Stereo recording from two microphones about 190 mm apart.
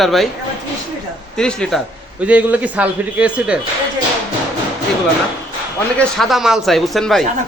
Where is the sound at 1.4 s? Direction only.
5° left (ahead or behind).